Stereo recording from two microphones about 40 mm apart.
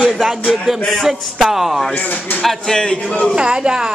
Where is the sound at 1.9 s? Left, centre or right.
Left.